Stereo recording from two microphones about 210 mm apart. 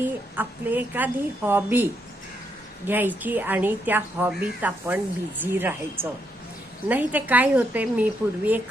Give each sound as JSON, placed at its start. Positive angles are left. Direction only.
{"t": 0.0, "sound": "a woman's voice", "side_deg": -10}